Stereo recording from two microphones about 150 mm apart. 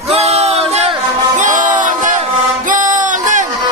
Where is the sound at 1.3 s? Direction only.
55° right (ahead or behind).